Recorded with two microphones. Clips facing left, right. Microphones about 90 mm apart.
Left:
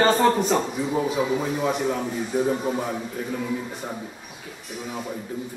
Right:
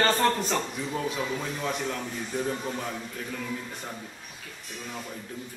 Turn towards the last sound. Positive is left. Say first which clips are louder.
# left 6 dB
turn(degrees=10)  # may be behind; listen again after turning